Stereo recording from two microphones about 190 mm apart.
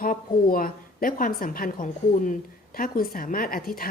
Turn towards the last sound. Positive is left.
turn(degrees=50)  # may be behind; listen again after turning